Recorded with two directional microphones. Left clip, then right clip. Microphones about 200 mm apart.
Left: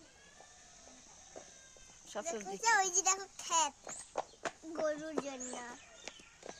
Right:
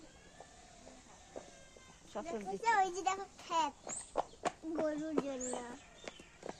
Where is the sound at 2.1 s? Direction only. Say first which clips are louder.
Left 1 dB; 65° left (ahead or behind).